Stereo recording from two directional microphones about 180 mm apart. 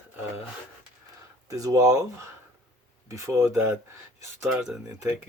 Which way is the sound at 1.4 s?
20° right (ahead or behind).